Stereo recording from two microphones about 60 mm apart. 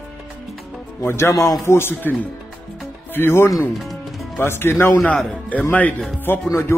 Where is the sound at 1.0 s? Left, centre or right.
Left.